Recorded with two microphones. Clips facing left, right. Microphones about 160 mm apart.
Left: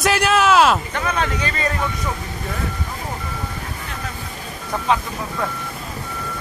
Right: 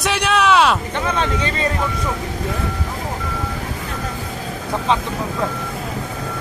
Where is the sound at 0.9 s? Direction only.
25° right (ahead or behind).